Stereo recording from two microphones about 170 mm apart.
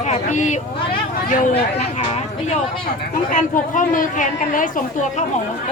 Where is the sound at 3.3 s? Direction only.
50° left (ahead or behind).